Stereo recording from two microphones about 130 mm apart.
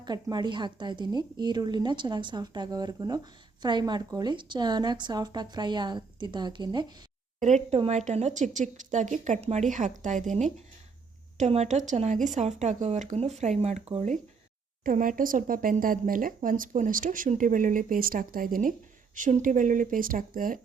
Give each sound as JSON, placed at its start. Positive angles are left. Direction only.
{"t": 0.0, "sound": "a woman's voice", "side_deg": -30}
{"t": 7.3, "sound": "a woman's voice", "side_deg": -65}
{"t": 11.3, "sound": "speech", "side_deg": -60}
{"t": 14.8, "sound": "speech", "side_deg": -90}